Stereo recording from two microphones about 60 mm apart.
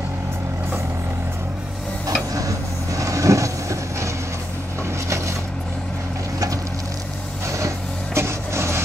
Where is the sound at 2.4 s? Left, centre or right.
Right.